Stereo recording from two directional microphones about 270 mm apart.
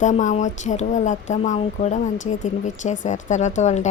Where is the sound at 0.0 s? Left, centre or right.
Left.